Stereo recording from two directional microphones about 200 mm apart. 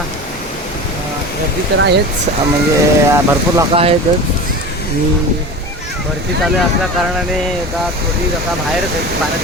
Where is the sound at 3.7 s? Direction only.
30° right (ahead or behind).